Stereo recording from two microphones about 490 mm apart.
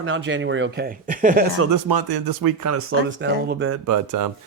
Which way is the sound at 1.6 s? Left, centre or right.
Right.